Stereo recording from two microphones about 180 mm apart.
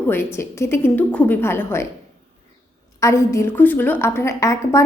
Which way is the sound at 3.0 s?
15° left (ahead or behind).